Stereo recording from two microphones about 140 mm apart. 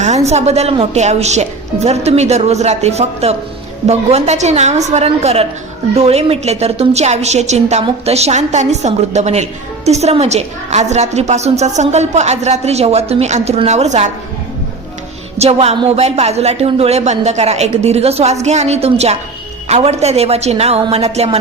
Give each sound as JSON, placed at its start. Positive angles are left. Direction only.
{"t": 0.3, "sound": "a woman's voice", "side_deg": -50}
{"t": 15.4, "sound": "a woman's voice", "side_deg": -50}